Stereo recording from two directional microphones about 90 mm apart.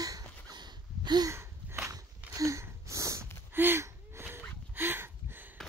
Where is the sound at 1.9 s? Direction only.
40° right (ahead or behind).